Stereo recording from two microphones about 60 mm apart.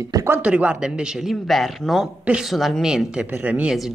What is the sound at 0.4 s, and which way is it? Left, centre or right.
Speech, right.